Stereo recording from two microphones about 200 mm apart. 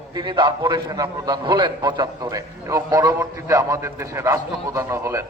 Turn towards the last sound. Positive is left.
turn(degrees=-15)  # may be behind; listen again after turning